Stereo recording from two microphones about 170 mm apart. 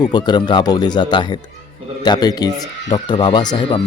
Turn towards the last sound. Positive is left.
turn(degrees=25)  # may be behind; listen again after turning